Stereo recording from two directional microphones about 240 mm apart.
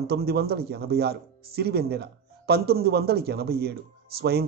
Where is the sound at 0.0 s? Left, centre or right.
Right.